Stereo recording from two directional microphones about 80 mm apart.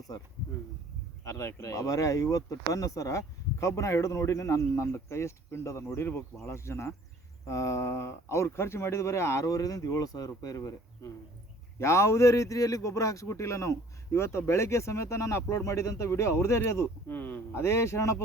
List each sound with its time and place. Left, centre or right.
1.2 s speech: left
17.1 s speech: left
17.6 s speech: left